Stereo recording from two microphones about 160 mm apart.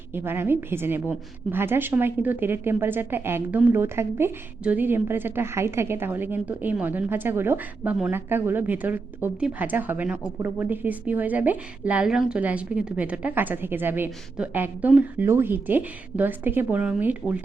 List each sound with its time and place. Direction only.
0.1 s a woman's voice: 15° right (ahead or behind)